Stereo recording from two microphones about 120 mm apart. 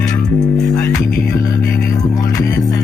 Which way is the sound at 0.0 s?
30° left (ahead or behind).